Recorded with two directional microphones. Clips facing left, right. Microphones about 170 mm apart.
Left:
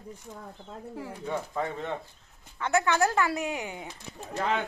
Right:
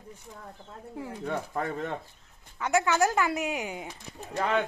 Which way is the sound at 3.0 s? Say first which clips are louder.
Even; 20° right (ahead or behind).